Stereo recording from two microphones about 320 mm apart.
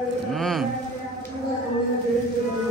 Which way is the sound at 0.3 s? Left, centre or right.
Centre.